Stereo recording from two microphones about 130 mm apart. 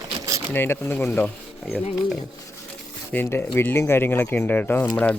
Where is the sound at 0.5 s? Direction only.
15° left (ahead or behind).